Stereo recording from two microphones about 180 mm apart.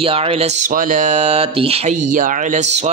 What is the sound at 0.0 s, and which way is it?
Speech, 30° right (ahead or behind).